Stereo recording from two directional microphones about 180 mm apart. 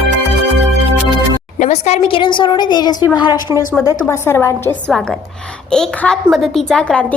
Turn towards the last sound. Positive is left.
turn(degrees=5)  # may be behind; listen again after turning